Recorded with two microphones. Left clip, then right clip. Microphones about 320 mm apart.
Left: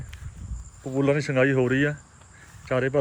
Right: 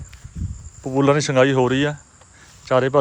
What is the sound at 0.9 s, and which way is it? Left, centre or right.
Speech, right.